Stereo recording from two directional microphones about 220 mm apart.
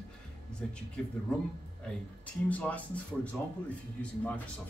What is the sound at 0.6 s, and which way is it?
Speech, 5° left (ahead or behind).